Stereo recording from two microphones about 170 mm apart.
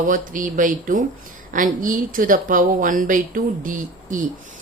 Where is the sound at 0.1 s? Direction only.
50° right (ahead or behind).